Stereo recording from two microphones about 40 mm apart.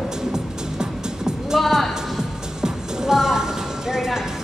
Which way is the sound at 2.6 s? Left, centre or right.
Centre.